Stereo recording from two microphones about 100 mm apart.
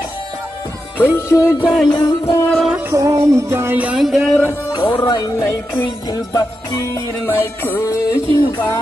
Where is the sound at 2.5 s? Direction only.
5° right (ahead or behind).